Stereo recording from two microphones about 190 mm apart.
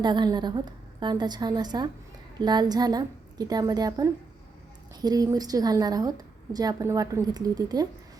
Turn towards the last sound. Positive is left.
turn(degrees=-20)  # may be behind; listen again after turning